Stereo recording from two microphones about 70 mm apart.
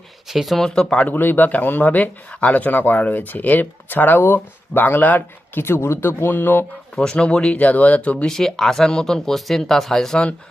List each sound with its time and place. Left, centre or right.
0.3 s speech: centre
1.0 s speech: left
6.9 s speech: centre
8.3 s speech: centre